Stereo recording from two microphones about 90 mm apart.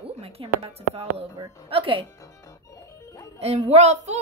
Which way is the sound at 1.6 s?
80° right.